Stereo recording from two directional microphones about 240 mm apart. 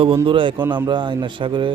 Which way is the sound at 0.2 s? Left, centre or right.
Right.